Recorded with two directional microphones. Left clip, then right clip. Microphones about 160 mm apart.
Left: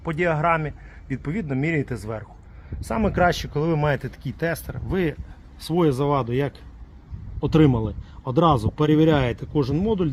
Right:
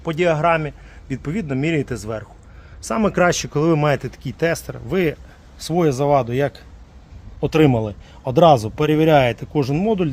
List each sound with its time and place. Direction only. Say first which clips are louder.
0.0 s a man's voice: right 5 dB; 25° right (ahead or behind)